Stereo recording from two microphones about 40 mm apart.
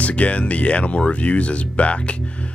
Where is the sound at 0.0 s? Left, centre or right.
Left.